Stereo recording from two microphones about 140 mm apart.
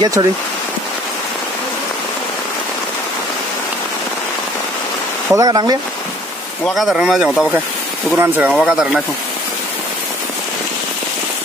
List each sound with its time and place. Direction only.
0.0 s speech: 30° right (ahead or behind)
5.3 s speech: 25° right (ahead or behind)
6.6 s speech: centre (ahead or behind)
8.5 s speech: centre (ahead or behind)